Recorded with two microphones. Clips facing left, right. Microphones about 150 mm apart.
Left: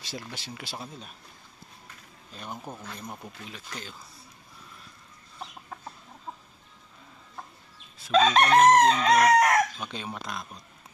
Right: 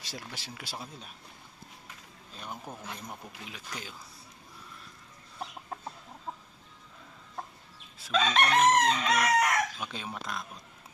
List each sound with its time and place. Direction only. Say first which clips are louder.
0.0 s speech: left 4 dB; 5° right (ahead or behind)
2.3 s speech: left 3 dB; centre (ahead or behind)
8.1 s chicken: left 6 dB; 40° left (ahead or behind)
9.8 s speech: left 2 dB; 5° right (ahead or behind)